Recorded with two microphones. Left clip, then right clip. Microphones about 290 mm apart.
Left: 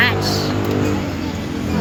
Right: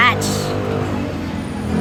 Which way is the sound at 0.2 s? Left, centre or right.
Right.